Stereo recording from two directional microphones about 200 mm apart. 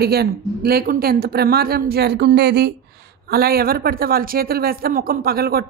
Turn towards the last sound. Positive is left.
turn(degrees=-50)  # may be behind; listen again after turning